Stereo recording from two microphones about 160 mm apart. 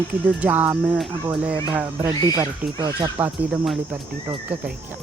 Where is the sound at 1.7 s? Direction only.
20° right (ahead or behind).